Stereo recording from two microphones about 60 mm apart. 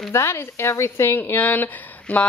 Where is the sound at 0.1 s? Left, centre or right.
Left.